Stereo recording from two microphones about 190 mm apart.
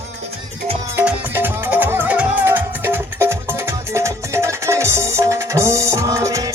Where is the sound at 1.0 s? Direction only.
10° right (ahead or behind).